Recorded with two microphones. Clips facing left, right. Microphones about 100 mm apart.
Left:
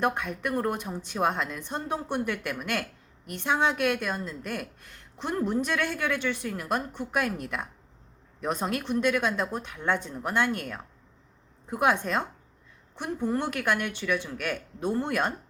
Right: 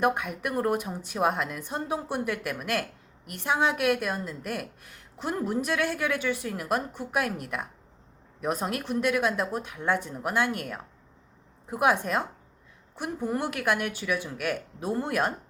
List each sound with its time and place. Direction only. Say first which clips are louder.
0.0 s a woman's voice: right 1 dB; 10° right (ahead or behind)